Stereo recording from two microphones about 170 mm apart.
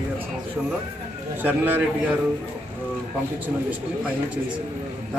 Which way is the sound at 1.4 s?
10° right (ahead or behind).